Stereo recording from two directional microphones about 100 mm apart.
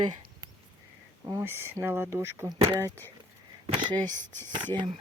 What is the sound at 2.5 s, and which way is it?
Speech, 35° right (ahead or behind).